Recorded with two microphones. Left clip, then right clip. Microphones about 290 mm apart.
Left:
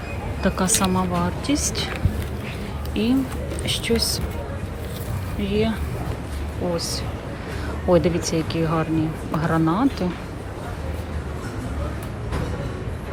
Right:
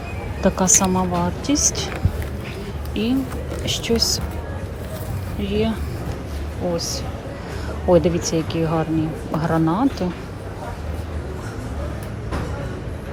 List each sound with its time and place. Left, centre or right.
0.4 s a woman's voice: centre
2.9 s a woman's voice: centre
5.4 s a woman's voice: centre
6.7 s a woman's voice: centre